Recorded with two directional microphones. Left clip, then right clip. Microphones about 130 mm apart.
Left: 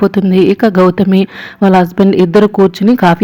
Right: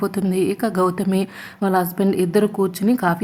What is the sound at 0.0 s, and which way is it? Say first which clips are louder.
A woman's voice: left 11 dB; 35° left (ahead or behind).